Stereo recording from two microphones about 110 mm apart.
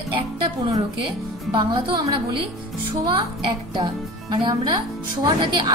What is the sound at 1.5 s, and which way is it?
A woman's voice, 45° right (ahead or behind).